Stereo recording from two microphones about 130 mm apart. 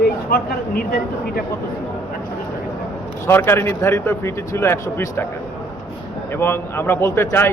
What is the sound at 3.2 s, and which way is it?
A man's voice, 15° left (ahead or behind).